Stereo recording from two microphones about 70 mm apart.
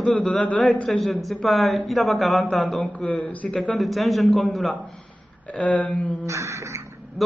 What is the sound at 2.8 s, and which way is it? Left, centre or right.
Speech, centre.